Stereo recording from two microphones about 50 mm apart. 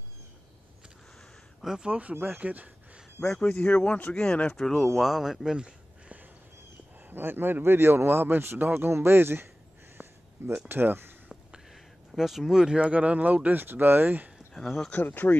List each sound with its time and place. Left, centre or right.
1.6 s speech: centre
2.3 s speech: right
3.4 s speech: left
4.6 s speech: centre
5.0 s speech: centre
7.1 s speech: right
10.0 s a sound: right
10.7 s speech: right
11.7 s a sound: centre
12.6 s speech: right
14.5 s speech: centre
15.0 s speech: left